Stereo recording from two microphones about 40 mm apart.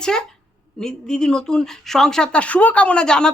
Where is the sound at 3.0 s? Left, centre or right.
Centre.